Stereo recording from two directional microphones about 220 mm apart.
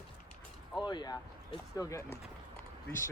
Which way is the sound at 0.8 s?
20° left (ahead or behind).